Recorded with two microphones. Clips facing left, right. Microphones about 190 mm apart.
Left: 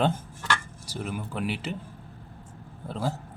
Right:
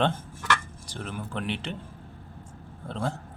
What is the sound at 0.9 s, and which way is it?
Speech, 10° left (ahead or behind).